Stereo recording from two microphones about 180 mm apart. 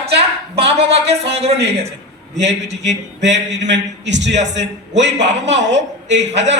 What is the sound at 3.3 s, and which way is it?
A man's voice, 80° right.